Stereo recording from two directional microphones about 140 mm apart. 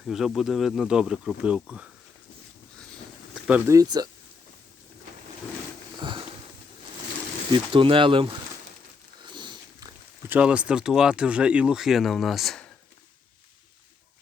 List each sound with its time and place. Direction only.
0.0 s speech: centre (ahead or behind)
3.7 s speech: 25° right (ahead or behind)
6.0 s sniff: 35° right (ahead or behind)
7.5 s speech: 40° right (ahead or behind)
9.2 s biting: 35° right (ahead or behind)
10.2 s speech: 10° right (ahead or behind)